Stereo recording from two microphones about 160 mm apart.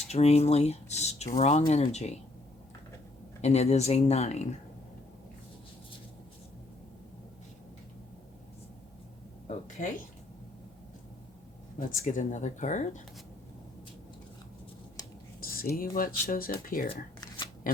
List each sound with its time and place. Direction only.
0.1 s speech: 40° left (ahead or behind)
3.4 s speech: 40° left (ahead or behind)
9.5 s speech: 50° left (ahead or behind)
11.9 s speech: 55° left (ahead or behind)
15.0 s whispering: 20° left (ahead or behind)
15.7 s speech: 60° left (ahead or behind)
17.2 s shuffling cards: 25° left (ahead or behind)